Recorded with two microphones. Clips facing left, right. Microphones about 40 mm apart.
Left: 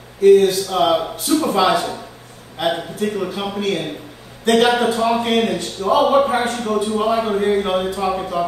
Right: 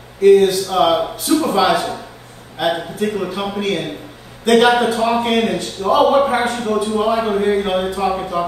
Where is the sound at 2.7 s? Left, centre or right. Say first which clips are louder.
Right 2 dB; centre.